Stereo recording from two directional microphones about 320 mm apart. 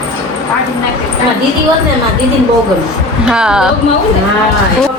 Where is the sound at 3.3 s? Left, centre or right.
Centre.